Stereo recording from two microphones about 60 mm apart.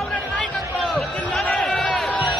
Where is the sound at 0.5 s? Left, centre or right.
Centre.